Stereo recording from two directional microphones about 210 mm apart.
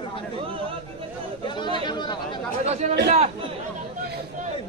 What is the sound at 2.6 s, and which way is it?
Chatter, 30° right (ahead or behind).